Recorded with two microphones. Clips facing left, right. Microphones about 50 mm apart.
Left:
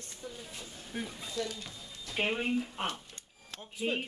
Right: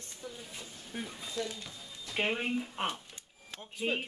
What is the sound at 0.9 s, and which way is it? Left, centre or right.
Speech, centre.